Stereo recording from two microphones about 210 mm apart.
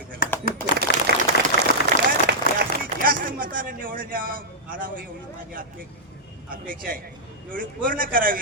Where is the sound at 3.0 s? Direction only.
40° right (ahead or behind).